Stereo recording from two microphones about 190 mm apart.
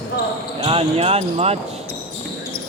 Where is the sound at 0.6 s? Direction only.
30° right (ahead or behind).